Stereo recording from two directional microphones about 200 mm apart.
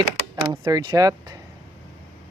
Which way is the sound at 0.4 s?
20° right (ahead or behind).